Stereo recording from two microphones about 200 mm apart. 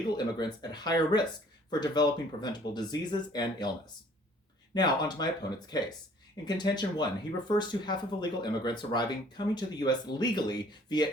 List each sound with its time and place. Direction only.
0.2 s speech: 20° left (ahead or behind)
4.7 s speech: 20° left (ahead or behind)